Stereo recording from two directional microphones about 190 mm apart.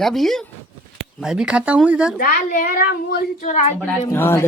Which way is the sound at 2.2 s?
45° left (ahead or behind).